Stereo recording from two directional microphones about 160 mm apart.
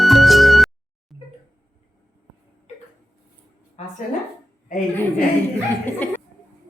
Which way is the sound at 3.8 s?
45° left (ahead or behind).